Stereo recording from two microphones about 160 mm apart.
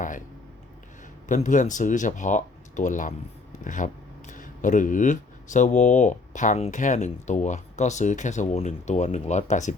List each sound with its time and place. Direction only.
1.3 s speech: 50° left (ahead or behind)